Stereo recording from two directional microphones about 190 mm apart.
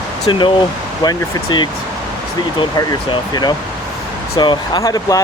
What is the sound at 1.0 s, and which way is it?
Speech, 25° left (ahead or behind).